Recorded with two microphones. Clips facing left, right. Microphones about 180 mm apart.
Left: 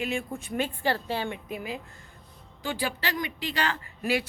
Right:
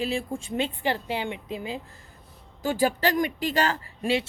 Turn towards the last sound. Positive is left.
turn(degrees=-25)  # may be behind; listen again after turning